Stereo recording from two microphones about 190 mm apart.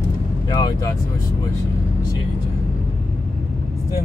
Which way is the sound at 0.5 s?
20° left (ahead or behind).